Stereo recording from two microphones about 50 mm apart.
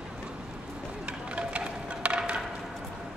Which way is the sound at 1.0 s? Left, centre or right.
Right.